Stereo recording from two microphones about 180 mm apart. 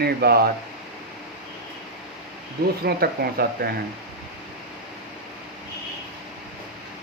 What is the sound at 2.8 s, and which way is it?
Speech, 60° right (ahead or behind).